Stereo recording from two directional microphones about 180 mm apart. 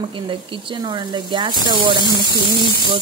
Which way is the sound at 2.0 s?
25° left (ahead or behind).